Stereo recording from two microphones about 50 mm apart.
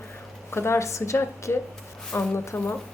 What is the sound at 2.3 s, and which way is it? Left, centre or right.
Speech, left.